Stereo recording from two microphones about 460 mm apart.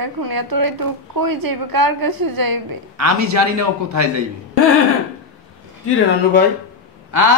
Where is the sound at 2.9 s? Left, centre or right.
Right.